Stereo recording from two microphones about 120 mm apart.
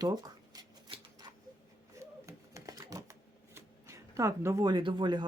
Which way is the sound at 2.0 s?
25° right (ahead or behind).